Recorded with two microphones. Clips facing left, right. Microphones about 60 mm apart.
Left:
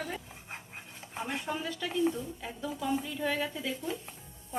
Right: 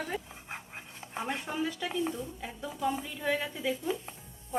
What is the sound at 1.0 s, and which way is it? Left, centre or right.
Stir, right.